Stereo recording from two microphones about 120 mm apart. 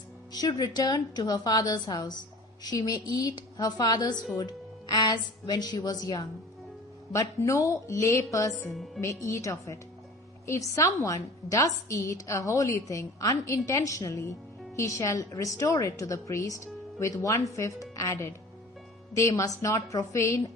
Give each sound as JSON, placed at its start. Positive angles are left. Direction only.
{"t": 0.3, "sound": "a woman's voice", "side_deg": 35}